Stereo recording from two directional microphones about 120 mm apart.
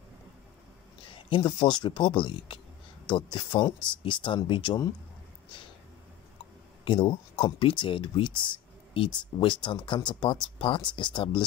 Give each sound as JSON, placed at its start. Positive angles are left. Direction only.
{"t": 1.1, "sound": "speech", "side_deg": 45}
{"t": 6.8, "sound": "speech", "side_deg": 45}